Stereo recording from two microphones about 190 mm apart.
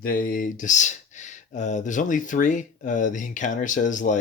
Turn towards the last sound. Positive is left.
turn(degrees=40)  # may be behind; listen again after turning